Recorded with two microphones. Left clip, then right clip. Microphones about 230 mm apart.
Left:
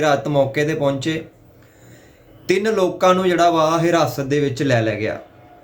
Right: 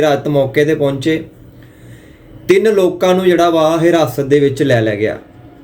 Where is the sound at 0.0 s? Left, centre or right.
Centre.